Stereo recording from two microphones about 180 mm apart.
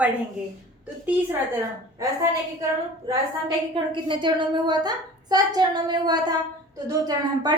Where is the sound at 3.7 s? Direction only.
25° right (ahead or behind).